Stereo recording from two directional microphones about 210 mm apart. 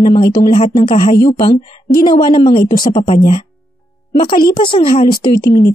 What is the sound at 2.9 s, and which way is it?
Speech, 30° left (ahead or behind).